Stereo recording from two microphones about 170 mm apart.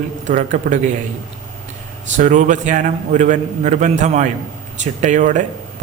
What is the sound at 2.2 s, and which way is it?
A man's voice, 50° right (ahead or behind).